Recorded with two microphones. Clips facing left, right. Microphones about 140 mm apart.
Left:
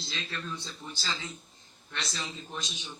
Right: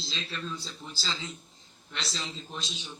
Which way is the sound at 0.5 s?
5° right (ahead or behind).